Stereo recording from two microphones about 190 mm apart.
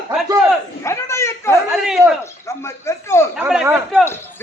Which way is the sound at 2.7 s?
15° left (ahead or behind).